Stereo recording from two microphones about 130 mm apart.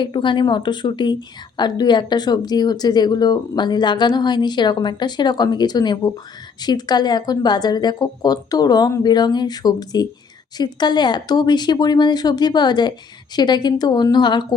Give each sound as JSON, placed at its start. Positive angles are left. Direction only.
{"t": 0.0, "sound": "speech", "side_deg": 40}